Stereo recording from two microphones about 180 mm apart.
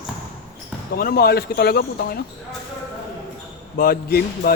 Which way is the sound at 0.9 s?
60° left (ahead or behind).